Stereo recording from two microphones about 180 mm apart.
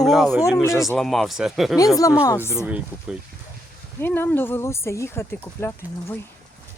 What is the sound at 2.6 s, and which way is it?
Speech, 5° right (ahead or behind).